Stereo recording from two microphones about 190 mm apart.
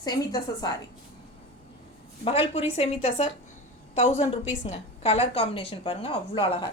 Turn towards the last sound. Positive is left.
turn(degrees=25)  # may be behind; listen again after turning